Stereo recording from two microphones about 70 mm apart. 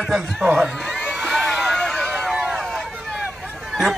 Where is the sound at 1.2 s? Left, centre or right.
Centre.